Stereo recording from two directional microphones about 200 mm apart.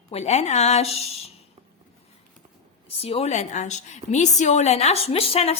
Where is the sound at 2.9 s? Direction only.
30° left (ahead or behind).